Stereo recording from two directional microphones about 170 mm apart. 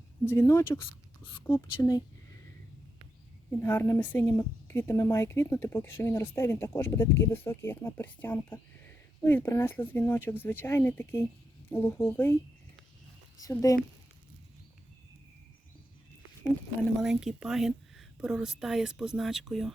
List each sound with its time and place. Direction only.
0.3 s speech: 15° left (ahead or behind)
1.2 s speech: 30° left (ahead or behind)
3.6 s speech: 15° left (ahead or behind)
13.4 s speech: 20° left (ahead or behind)
17.0 s a woman's voice: centre (ahead or behind)